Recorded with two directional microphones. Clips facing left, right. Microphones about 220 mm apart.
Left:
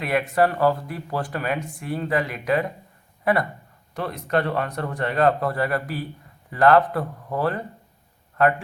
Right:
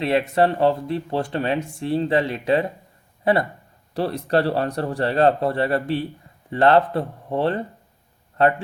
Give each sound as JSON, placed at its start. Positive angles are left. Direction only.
{"t": 0.0, "sound": "speech", "side_deg": -25}